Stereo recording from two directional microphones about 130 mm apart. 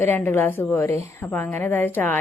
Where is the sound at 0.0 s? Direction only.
15° left (ahead or behind).